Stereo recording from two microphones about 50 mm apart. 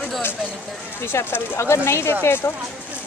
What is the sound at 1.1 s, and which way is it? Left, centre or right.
Speech, left.